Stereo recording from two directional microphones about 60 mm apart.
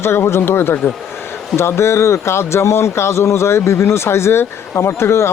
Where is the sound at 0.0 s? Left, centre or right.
Left.